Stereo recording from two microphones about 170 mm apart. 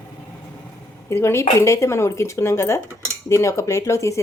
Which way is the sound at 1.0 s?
15° left (ahead or behind).